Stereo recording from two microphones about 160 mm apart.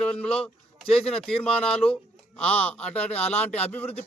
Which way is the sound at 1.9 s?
10° left (ahead or behind).